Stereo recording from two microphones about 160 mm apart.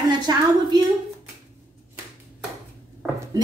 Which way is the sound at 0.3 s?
25° right (ahead or behind).